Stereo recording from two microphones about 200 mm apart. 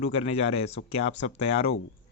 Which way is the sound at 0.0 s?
30° left (ahead or behind).